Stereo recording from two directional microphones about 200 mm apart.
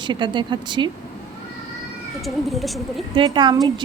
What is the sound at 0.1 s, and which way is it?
Speech, 25° right (ahead or behind).